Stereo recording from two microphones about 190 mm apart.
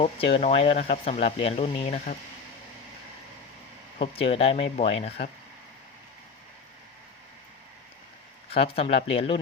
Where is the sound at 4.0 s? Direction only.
30° left (ahead or behind).